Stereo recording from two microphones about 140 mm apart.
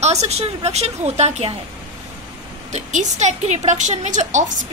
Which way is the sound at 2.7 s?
55° right (ahead or behind).